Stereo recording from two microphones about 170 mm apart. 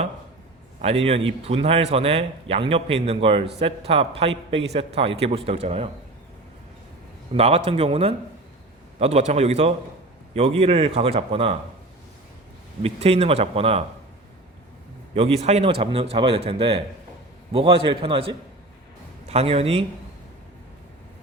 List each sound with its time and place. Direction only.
0.8 s a man's voice: 35° right (ahead or behind)
7.3 s a man's voice: 35° right (ahead or behind)
12.8 s a man's voice: 35° right (ahead or behind)
15.1 s a man's voice: 35° right (ahead or behind)